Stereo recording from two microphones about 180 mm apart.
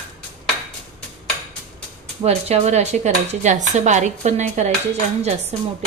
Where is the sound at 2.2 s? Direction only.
35° right (ahead or behind).